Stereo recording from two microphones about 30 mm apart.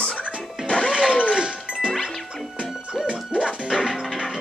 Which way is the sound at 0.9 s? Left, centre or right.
Right.